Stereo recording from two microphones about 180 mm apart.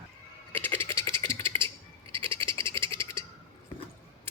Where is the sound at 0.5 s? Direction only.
10° left (ahead or behind).